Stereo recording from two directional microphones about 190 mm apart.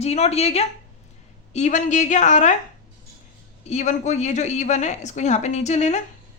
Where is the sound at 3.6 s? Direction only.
40° left (ahead or behind).